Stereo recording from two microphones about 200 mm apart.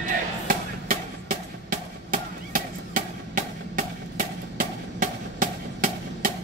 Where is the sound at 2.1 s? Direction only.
45° right (ahead or behind).